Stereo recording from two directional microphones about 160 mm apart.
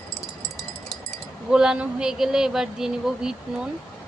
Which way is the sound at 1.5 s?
5° right (ahead or behind).